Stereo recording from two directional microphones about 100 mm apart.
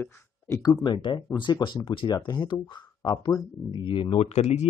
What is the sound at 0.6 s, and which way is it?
Speech, 45° left (ahead or behind).